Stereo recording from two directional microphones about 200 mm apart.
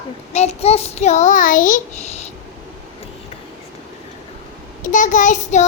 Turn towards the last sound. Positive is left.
turn(degrees=35)  # may be behind; listen again after turning